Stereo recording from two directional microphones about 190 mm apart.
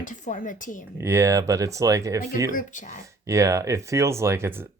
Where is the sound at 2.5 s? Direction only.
45° left (ahead or behind).